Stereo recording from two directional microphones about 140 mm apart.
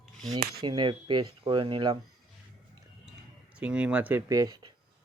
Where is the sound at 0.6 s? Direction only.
30° right (ahead or behind).